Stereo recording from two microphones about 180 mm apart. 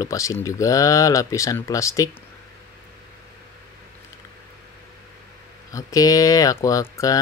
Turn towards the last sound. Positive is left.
turn(degrees=20)  # may be behind; listen again after turning